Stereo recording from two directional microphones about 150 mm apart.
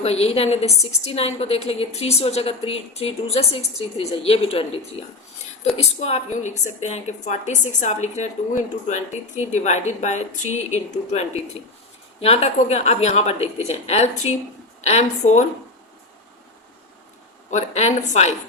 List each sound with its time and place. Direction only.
0.0 s a woman's voice: 45° left (ahead or behind)
12.2 s a woman's voice: 45° left (ahead or behind)
17.5 s a woman's voice: 50° left (ahead or behind)